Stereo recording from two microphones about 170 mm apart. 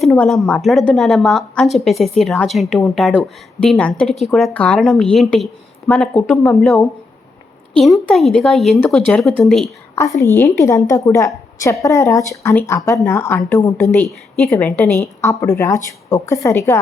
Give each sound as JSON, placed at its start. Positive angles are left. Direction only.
{"t": 0.0, "sound": "a woman's voice", "side_deg": 0}
{"t": 9.9, "sound": "a woman's voice", "side_deg": 15}